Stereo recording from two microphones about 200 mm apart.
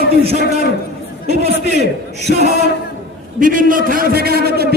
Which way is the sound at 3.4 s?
45° right (ahead or behind).